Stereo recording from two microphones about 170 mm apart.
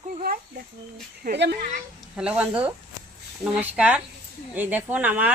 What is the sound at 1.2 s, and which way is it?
Speech, 60° right (ahead or behind).